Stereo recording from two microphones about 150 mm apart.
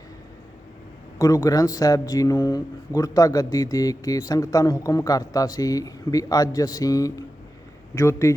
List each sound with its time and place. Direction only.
1.2 s speech: 25° left (ahead or behind)